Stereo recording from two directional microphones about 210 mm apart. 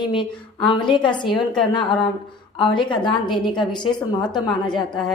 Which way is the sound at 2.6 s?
25° left (ahead or behind).